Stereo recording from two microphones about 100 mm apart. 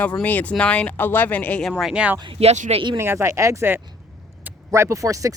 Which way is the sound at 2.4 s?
90° right.